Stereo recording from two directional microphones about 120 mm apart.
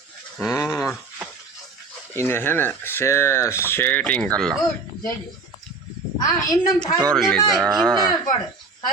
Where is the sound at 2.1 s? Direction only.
20° left (ahead or behind).